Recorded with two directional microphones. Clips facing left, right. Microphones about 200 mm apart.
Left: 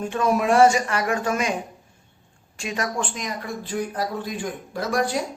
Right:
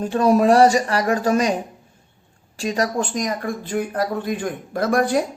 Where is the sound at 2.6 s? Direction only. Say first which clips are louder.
Right 6 dB; 35° right (ahead or behind).